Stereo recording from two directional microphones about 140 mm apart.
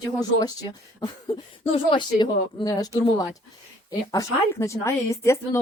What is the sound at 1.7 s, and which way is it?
A woman's voice, 40° left (ahead or behind).